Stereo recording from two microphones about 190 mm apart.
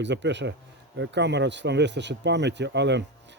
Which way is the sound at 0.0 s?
70° right (ahead or behind).